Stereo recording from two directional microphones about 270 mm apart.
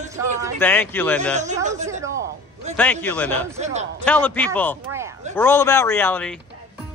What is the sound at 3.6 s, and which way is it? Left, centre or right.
Speech, right.